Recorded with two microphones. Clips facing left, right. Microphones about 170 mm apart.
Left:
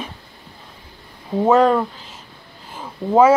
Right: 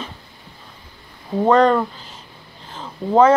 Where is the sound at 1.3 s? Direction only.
5° left (ahead or behind).